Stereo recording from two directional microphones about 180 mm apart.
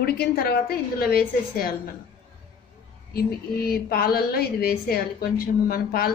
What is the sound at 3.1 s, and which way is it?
A woman's voice, 60° left (ahead or behind).